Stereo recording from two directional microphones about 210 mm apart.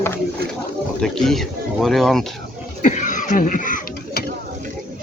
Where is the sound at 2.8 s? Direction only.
35° left (ahead or behind).